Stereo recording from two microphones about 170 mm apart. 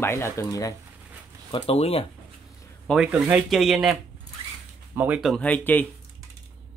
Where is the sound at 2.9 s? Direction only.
5° left (ahead or behind).